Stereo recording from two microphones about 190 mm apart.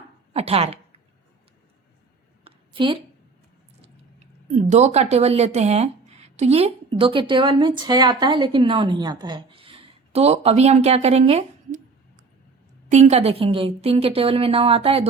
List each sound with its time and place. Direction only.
0.3 s a woman's voice: 30° right (ahead or behind)
2.4 s a sound: 25° right (ahead or behind)
4.5 s a woman's voice: 35° right (ahead or behind)